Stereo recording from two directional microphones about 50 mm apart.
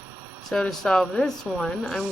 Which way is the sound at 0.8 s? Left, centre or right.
Centre.